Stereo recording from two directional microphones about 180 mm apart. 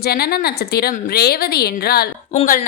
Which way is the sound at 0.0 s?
60° left (ahead or behind).